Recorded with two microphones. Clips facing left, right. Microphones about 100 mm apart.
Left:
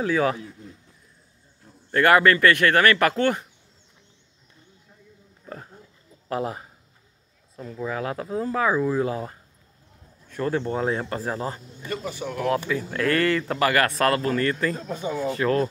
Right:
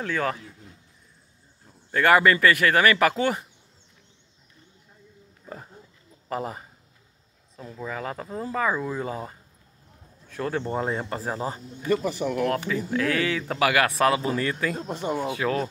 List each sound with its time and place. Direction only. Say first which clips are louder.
0.0 s speech: left 5 dB; 5° left (ahead or behind)
1.9 s speech: left 1 dB; centre (ahead or behind)
5.4 s a sound: left 1 dB; 5° right (ahead or behind)
6.2 s speech: left 3 dB; centre (ahead or behind)
15.0 s speech: right 1 dB; 60° right (ahead or behind)
15.2 s speech: left 6 dB; 10° right (ahead or behind)